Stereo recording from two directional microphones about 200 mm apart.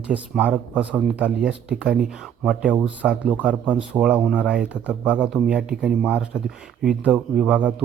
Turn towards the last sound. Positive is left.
turn(degrees=-5)  # may be behind; listen again after turning